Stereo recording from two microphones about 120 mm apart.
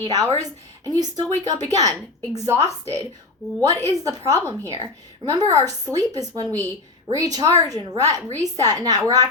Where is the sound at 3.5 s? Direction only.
20° left (ahead or behind).